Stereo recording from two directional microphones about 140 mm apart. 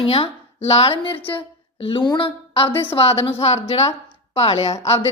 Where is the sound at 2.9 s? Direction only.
45° left (ahead or behind).